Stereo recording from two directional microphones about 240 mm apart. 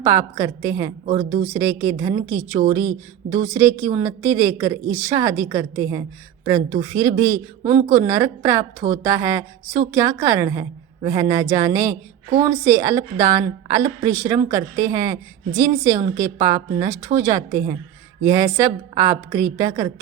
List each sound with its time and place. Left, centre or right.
0.0 s a woman's voice: centre
1.0 s speech: right
1.5 s a woman's voice: centre